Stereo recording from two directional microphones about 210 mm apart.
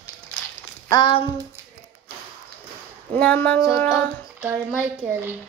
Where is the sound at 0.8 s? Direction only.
20° left (ahead or behind).